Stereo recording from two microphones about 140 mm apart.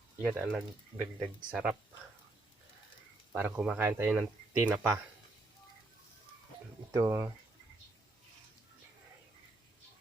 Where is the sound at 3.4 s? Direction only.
10° right (ahead or behind).